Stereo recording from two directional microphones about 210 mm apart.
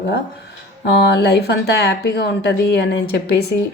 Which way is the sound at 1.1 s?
50° left (ahead or behind).